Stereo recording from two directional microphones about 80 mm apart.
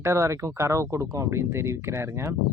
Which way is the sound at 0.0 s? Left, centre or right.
Right.